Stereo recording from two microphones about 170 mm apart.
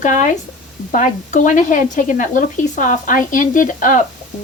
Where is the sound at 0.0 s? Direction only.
50° left (ahead or behind).